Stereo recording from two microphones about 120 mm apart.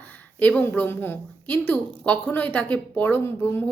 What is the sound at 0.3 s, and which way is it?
Speech, 15° left (ahead or behind).